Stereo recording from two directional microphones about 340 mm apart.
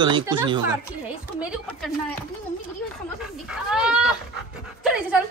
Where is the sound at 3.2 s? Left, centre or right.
Centre.